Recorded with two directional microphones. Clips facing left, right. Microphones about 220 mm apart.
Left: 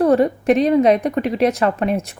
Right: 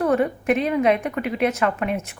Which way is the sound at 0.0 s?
35° left (ahead or behind).